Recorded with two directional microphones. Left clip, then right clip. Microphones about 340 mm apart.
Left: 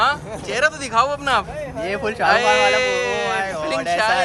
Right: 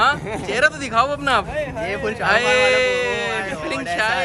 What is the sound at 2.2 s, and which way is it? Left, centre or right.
Speech, centre.